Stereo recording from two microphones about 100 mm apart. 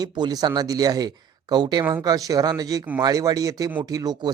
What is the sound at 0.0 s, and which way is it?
Speech, 45° right (ahead or behind).